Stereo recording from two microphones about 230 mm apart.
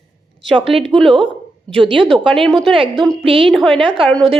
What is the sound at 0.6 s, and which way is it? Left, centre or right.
Speech, right.